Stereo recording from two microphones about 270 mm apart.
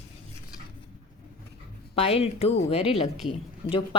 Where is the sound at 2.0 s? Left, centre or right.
Left.